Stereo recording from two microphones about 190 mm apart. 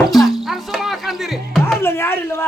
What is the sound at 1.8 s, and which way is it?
Speech, 15° left (ahead or behind).